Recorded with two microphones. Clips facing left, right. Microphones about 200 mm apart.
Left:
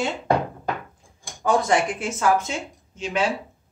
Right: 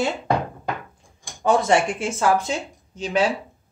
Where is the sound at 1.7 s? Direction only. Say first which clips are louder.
Right 2 dB; 30° right (ahead or behind).